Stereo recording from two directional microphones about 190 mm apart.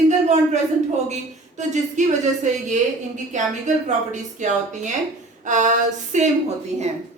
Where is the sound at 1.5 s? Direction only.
40° right (ahead or behind).